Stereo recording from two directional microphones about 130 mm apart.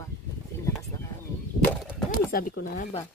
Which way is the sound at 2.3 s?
90° left.